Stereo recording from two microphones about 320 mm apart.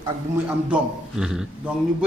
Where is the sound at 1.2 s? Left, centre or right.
Centre.